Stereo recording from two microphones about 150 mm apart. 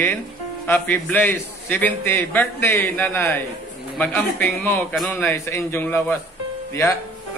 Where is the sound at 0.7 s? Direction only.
10° left (ahead or behind).